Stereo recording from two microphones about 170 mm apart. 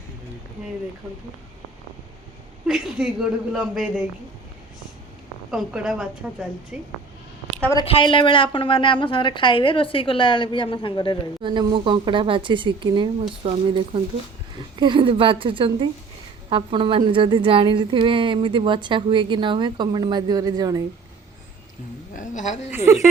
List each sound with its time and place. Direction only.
2.6 s speech: 5° right (ahead or behind)
5.5 s speech: 5° right (ahead or behind)
7.9 s a woman's voice: 30° left (ahead or behind)
11.4 s a woman's voice: 30° right (ahead or behind)
22.1 s a woman's voice: 50° left (ahead or behind)
22.9 s speech: 15° right (ahead or behind)